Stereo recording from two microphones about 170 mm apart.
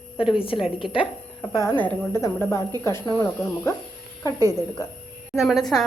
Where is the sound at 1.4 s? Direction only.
15° left (ahead or behind).